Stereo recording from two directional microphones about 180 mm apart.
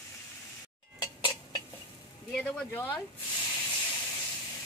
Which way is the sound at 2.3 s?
5° left (ahead or behind).